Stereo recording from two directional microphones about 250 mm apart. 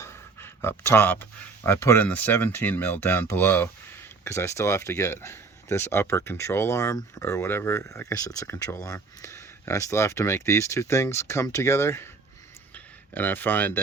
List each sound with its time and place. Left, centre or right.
0.0 s speech: centre